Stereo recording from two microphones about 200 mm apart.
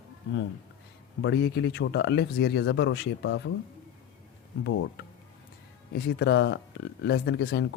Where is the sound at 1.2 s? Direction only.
60° left (ahead or behind).